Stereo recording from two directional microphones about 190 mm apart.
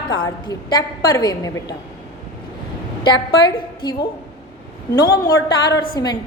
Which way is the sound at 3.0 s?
25° left (ahead or behind).